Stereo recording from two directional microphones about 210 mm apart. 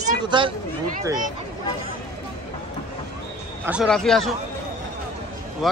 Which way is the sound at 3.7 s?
Centre (ahead or behind).